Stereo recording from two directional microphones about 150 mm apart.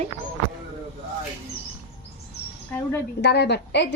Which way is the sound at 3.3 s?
90° left.